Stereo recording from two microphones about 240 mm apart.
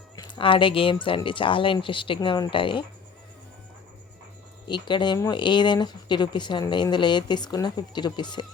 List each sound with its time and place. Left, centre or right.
0.2 s speech: left
4.7 s speech: centre